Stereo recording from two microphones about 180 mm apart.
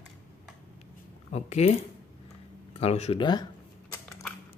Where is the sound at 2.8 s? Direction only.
35° left (ahead or behind).